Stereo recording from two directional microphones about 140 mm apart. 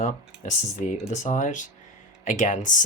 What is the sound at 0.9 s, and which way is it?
Speech, 55° left (ahead or behind).